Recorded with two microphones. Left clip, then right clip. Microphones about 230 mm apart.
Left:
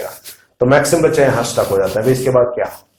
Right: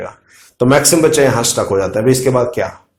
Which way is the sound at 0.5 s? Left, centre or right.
Right.